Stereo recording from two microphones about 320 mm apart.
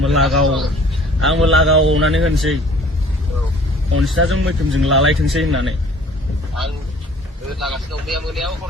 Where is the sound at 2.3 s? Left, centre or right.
Centre.